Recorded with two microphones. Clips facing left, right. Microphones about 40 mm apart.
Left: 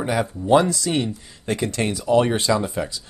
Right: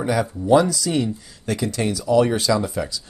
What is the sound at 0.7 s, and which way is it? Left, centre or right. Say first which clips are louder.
Speech: right 1 dB; left.